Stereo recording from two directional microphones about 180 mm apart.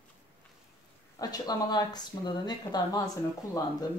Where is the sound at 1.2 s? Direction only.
20° left (ahead or behind).